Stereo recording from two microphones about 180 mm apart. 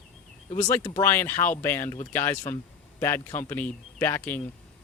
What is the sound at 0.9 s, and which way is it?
Speech, 10° left (ahead or behind).